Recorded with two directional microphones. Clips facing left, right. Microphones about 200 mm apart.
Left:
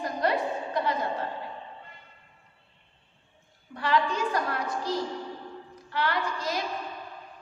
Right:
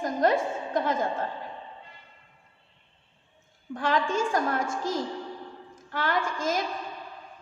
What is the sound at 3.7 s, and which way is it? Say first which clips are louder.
A woman's voice: right 1 dB; 45° right (ahead or behind).